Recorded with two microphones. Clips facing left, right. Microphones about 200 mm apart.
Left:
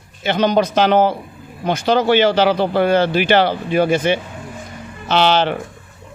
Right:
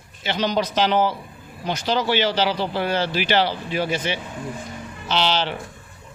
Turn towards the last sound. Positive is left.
turn(degrees=55)  # may be behind; listen again after turning